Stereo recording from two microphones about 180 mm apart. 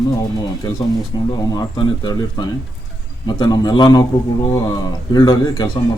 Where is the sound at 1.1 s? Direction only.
20° left (ahead or behind).